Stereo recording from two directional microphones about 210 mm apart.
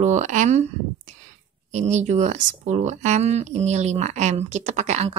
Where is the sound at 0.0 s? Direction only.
35° right (ahead or behind).